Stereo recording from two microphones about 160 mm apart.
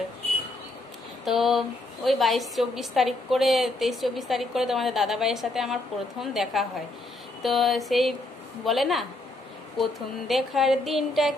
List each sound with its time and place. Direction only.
1.2 s a woman's voice: centre (ahead or behind)